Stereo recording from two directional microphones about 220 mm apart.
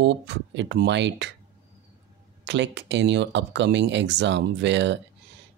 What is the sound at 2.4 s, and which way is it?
Speech, 55° right (ahead or behind).